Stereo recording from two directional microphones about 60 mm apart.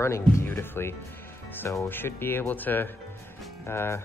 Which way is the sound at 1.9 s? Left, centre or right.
Left.